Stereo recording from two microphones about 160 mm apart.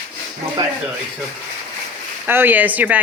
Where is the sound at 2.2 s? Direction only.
10° right (ahead or behind).